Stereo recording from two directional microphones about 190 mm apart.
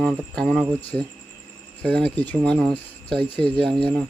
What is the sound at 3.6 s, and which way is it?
Speech, 25° right (ahead or behind).